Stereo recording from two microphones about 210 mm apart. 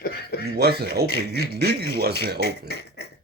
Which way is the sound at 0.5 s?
50° right (ahead or behind).